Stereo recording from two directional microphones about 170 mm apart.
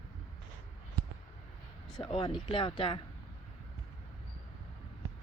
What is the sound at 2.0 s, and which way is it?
Speech, 30° left (ahead or behind).